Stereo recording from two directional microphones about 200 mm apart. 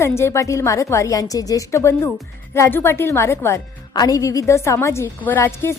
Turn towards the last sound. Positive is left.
turn(degrees=15)  # may be behind; listen again after turning